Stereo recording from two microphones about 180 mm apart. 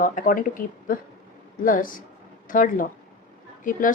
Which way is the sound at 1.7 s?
50° left (ahead or behind).